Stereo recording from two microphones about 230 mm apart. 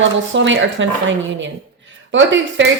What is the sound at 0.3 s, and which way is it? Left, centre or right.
Speech, right.